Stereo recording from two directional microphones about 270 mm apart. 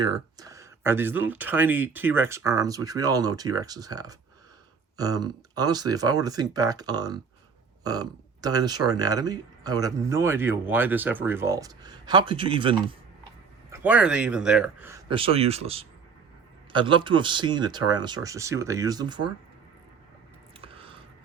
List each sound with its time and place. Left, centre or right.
0.0 s speech: centre
13.7 s speech: centre
20.7 s a sound: centre